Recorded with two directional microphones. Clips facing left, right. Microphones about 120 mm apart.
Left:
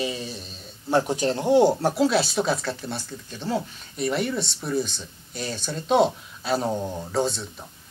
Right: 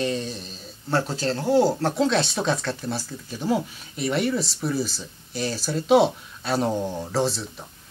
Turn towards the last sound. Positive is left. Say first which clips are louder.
# right 1 dB
turn(degrees=0)  # may be behind; listen again after turning